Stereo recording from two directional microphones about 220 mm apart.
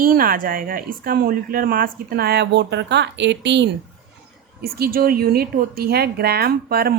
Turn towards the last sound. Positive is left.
turn(degrees=-45)  # may be behind; listen again after turning